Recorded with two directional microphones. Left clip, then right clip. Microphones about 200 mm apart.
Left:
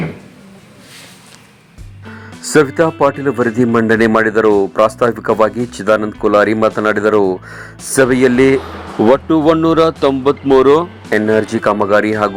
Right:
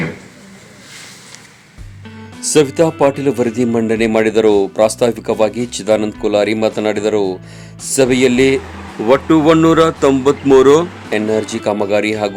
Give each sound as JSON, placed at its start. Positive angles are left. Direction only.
{"t": 2.5, "sound": "a man's voice", "side_deg": 5}
{"t": 3.8, "sound": "speech", "side_deg": 40}
{"t": 4.3, "sound": "a man's voice", "side_deg": 5}
{"t": 8.1, "sound": "speech", "side_deg": 45}
{"t": 9.0, "sound": "speech", "side_deg": 15}